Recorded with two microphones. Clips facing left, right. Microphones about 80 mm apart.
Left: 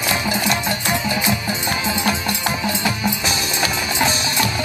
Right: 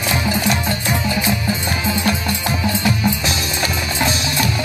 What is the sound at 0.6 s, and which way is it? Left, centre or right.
Music, centre.